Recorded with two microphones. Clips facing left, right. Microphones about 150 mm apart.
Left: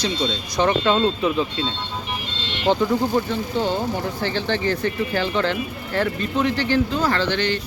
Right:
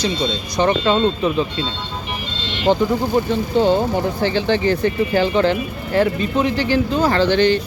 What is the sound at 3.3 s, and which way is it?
Speech, 20° right (ahead or behind).